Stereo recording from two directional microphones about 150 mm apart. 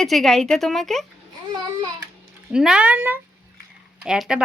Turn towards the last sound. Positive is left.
turn(degrees=-5)  # may be behind; listen again after turning